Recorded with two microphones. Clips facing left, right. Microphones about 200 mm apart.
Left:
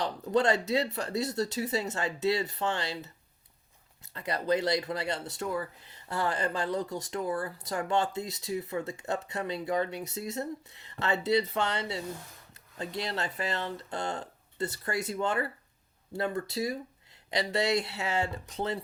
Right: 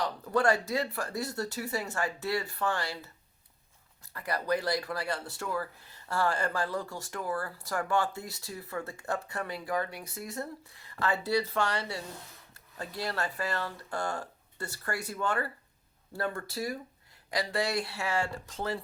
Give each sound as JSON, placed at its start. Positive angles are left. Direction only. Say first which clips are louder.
{"t": 0.0, "sound": "speech", "louder": "left 1 dB", "side_deg": 20}
{"t": 4.1, "sound": "speech", "louder": "left 2 dB", "side_deg": 25}